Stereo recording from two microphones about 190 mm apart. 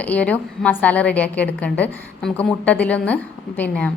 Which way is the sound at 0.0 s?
5° left (ahead or behind).